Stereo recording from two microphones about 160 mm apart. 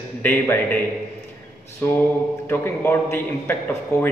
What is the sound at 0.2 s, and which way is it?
Speech, 10° left (ahead or behind).